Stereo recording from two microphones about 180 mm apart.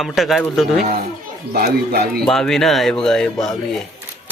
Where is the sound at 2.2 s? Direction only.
5° left (ahead or behind).